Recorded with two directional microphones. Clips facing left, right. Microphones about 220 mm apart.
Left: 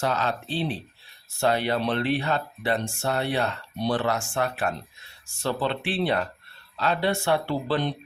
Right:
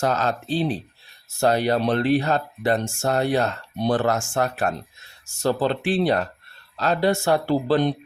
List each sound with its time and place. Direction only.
0.0 s speech: 45° right (ahead or behind)